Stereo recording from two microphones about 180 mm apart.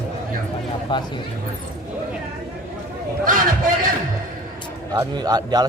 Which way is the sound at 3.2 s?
50° right (ahead or behind).